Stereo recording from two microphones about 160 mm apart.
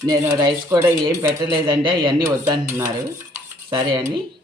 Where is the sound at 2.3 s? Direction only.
15° right (ahead or behind).